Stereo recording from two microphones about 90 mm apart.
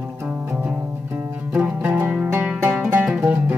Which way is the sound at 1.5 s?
15° right (ahead or behind).